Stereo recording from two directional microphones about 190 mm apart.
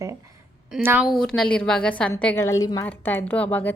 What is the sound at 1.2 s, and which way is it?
A woman's voice, 5° left (ahead or behind).